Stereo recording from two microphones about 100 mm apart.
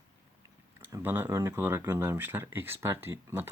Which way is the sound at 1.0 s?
20° right (ahead or behind).